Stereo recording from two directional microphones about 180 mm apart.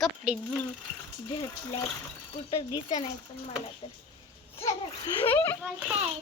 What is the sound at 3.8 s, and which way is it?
Speech, 35° left (ahead or behind).